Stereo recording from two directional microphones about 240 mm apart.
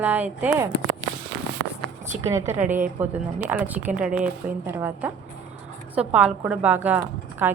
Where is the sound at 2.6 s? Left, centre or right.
Right.